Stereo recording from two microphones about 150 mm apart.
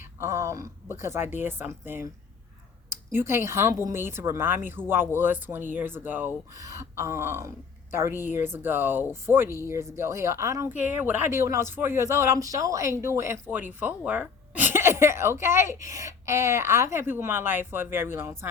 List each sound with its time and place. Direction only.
0.2 s speech: 20° right (ahead or behind)
2.9 s speech: 15° right (ahead or behind)